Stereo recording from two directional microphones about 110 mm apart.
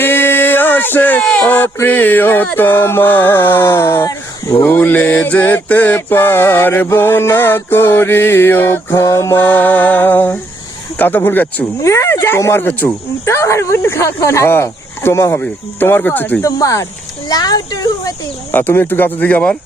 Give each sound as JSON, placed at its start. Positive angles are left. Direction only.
{"t": 0.0, "sound": "music", "side_deg": 20}
{"t": 10.9, "sound": "speech", "side_deg": 20}
{"t": 11.8, "sound": "music", "side_deg": 25}
{"t": 16.4, "sound": "speech", "side_deg": 30}
{"t": 18.5, "sound": "speech", "side_deg": 20}